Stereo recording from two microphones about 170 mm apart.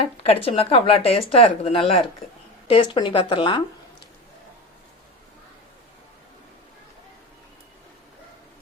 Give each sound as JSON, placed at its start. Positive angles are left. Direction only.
{"t": 0.0, "sound": "speech", "side_deg": 35}